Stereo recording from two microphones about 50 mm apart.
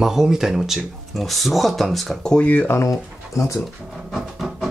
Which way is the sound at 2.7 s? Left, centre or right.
Left.